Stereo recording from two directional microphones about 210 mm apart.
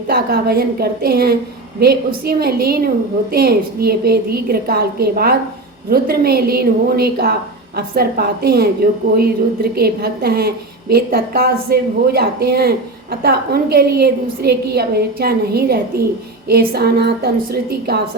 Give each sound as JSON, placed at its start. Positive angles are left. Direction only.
{"t": 0.1, "sound": "a woman's voice", "side_deg": -50}